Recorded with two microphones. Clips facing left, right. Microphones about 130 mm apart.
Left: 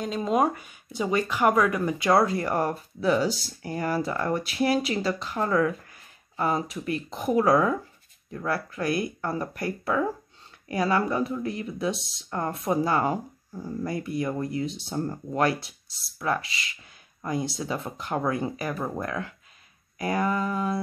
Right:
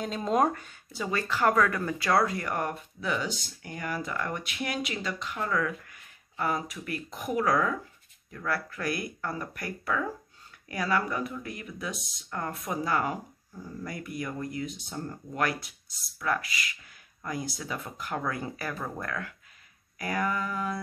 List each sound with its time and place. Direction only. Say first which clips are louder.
0.0 s speech: left 2 dB; centre (ahead or behind)
0.9 s speech: left 5 dB; 20° left (ahead or behind)